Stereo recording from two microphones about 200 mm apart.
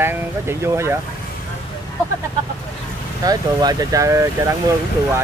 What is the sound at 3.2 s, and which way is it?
Speech, 20° right (ahead or behind).